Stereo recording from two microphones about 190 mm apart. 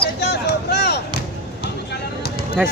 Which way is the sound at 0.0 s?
60° left (ahead or behind).